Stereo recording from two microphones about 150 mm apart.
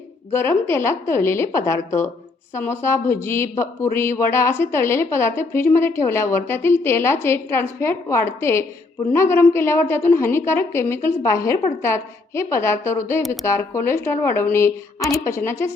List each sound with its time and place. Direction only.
0.3 s speech: 15° left (ahead or behind)